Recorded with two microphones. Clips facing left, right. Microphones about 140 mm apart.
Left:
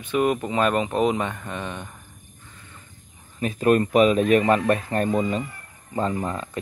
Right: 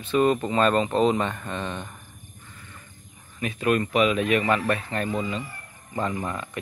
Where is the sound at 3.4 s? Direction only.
40° left (ahead or behind).